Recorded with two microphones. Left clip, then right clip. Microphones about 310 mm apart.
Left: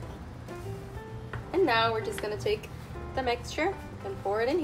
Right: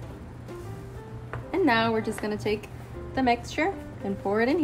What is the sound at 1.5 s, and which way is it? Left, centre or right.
A woman's voice, right.